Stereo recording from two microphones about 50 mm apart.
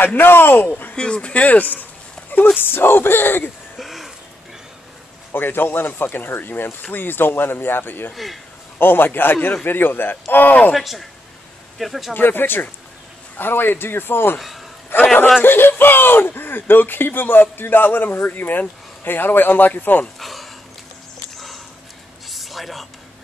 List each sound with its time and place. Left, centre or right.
0.0 s speech: left
0.9 s speech: centre
2.6 s speech: left
3.7 s a sound: centre
5.3 s speech: left
8.1 s speech: centre
8.7 s speech: left
10.7 s speech: centre
12.1 s speech: left
14.9 s a sound: left
15.4 s speech: left
20.2 s a sound: centre
22.3 s a sound: centre